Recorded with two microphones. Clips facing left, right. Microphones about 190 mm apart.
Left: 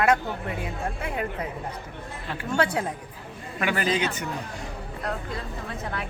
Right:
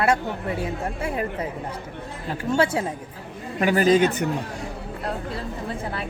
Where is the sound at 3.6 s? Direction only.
40° right (ahead or behind).